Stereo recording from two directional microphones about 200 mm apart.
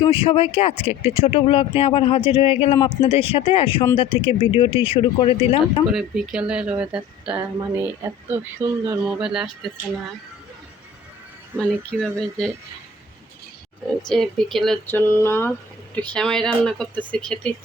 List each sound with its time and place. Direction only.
0.0 s speech: 25° left (ahead or behind)
5.9 s speech: centre (ahead or behind)
8.9 s speech: 5° right (ahead or behind)
11.5 s speech: 5° left (ahead or behind)
14.1 s speech: centre (ahead or behind)